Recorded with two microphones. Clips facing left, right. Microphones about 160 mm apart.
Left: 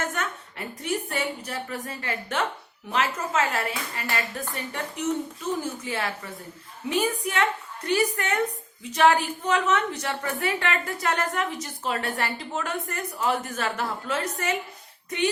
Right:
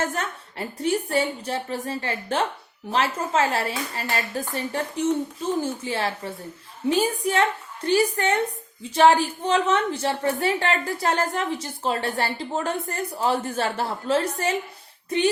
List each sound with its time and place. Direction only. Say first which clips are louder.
0.0 s a woman's voice: right 3 dB; 35° right (ahead or behind)